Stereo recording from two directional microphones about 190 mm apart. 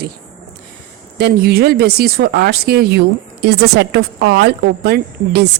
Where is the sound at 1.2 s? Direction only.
55° right (ahead or behind).